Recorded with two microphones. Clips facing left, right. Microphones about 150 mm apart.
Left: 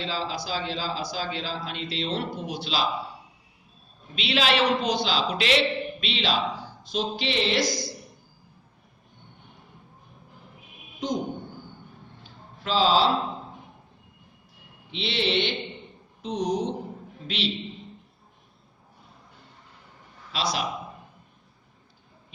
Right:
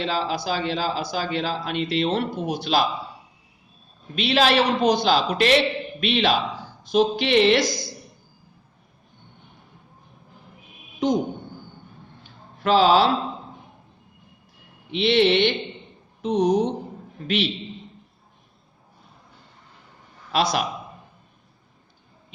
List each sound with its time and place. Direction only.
0.0 s a man's voice: 65° right (ahead or behind)
4.1 s a man's voice: 45° right (ahead or behind)
12.6 s a man's voice: 60° right (ahead or behind)
14.8 s a man's voice: 60° right (ahead or behind)
20.3 s a man's voice: 55° right (ahead or behind)